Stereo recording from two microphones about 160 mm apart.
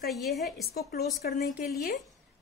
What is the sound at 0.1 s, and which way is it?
Speech, centre (ahead or behind).